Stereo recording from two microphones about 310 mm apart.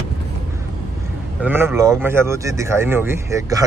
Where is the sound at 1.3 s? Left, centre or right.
Centre.